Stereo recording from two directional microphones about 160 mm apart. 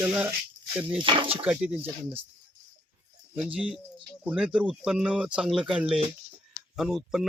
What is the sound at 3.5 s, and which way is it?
Speech, 5° right (ahead or behind).